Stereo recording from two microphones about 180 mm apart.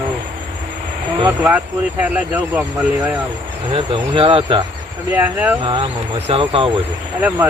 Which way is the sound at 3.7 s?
30° right (ahead or behind).